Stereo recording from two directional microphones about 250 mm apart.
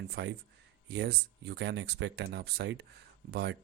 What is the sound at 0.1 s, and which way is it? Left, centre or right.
Speech, right.